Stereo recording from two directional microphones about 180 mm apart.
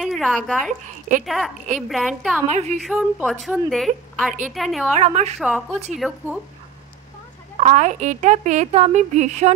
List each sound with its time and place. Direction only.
0.0 s speech: centre (ahead or behind)
0.7 s a woman's voice: 45° right (ahead or behind)
1.2 s a woman's voice: centre (ahead or behind)
2.5 s speech: 40° right (ahead or behind)
2.8 s a woman's voice: centre (ahead or behind)
4.3 s a woman's voice: 45° right (ahead or behind)
4.6 s a woman's voice: centre (ahead or behind)
4.9 s speech: 40° right (ahead or behind)
5.4 s a woman's voice: centre (ahead or behind)
7.5 s speech: 40° right (ahead or behind)